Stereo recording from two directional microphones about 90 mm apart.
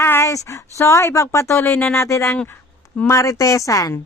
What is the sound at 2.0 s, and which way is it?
Speech, 35° left (ahead or behind).